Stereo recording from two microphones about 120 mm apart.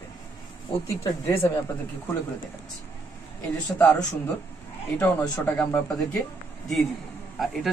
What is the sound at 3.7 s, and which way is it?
Speech, 15° left (ahead or behind).